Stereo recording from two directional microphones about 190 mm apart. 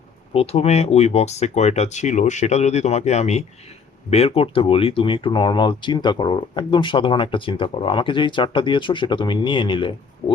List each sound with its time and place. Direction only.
0.3 s speech: 30° left (ahead or behind)